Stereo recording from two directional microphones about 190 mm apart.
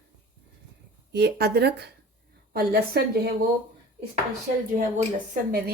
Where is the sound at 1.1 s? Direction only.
60° right (ahead or behind).